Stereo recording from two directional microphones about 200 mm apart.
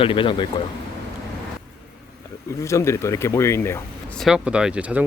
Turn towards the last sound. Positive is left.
turn(degrees=-5)  # may be behind; listen again after turning